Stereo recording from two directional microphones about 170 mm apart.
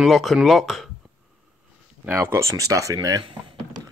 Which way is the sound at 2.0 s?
15° right (ahead or behind).